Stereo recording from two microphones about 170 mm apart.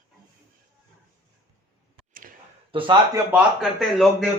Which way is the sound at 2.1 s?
55° right (ahead or behind).